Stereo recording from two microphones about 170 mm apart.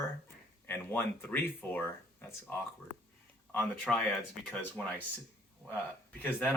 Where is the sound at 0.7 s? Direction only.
10° left (ahead or behind).